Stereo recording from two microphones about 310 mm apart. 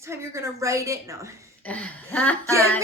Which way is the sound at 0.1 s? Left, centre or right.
Centre.